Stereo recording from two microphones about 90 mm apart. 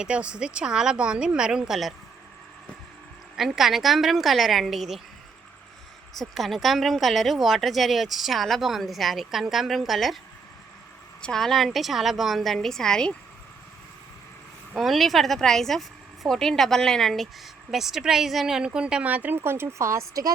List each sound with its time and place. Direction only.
0.0 s a woman's voice: 10° right (ahead or behind)
3.3 s a woman's voice: 5° right (ahead or behind)
6.1 s a woman's voice: centre (ahead or behind)
11.2 s a woman's voice: 5° left (ahead or behind)
14.7 s a woman's voice: centre (ahead or behind); by 20.2 s 35° right (ahead or behind)